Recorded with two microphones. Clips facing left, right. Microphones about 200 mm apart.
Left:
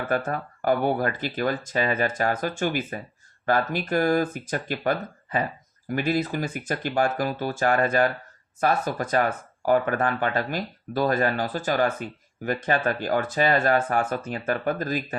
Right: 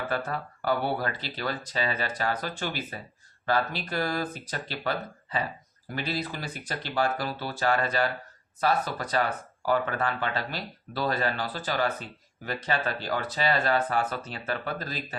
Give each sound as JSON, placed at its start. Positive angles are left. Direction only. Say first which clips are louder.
{"t": 0.1, "sound": "speech", "louder": "left 5 dB", "side_deg": 50}